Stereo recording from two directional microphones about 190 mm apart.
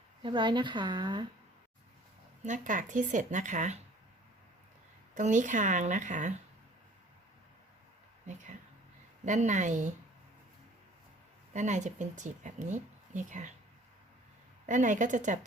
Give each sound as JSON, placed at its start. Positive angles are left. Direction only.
{"t": 0.2, "sound": "speech", "side_deg": -25}
{"t": 2.4, "sound": "speech", "side_deg": -40}
{"t": 5.1, "sound": "speech", "side_deg": -40}
{"t": 9.2, "sound": "speech", "side_deg": -40}
{"t": 11.5, "sound": "speech", "side_deg": -40}
{"t": 14.7, "sound": "speech", "side_deg": -40}